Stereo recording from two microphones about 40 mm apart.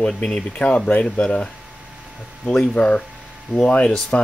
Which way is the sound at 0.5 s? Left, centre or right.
Left.